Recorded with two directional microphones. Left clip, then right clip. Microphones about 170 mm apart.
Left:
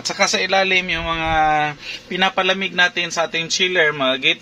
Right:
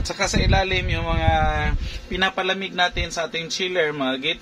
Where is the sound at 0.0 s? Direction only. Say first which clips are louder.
Left 5 dB; 40° left (ahead or behind).